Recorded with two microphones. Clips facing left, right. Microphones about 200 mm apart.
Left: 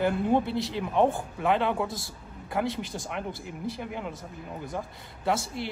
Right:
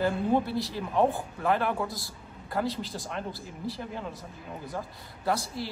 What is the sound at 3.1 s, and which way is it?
Speech, 20° left (ahead or behind).